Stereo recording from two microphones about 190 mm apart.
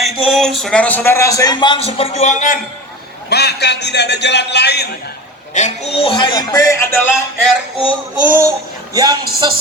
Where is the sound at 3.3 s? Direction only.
60° left (ahead or behind).